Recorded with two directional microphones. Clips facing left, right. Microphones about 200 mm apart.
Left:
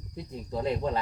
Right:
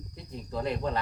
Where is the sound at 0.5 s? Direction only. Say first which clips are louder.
Left 2 dB; 20° left (ahead or behind).